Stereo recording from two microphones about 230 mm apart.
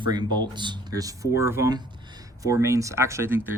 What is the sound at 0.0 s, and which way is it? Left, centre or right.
Speech, centre.